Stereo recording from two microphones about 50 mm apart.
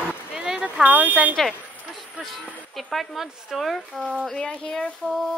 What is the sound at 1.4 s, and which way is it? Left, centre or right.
Speech, centre.